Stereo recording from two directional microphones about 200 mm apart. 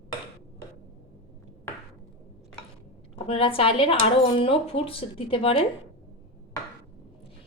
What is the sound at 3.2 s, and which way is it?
Speech, 30° left (ahead or behind).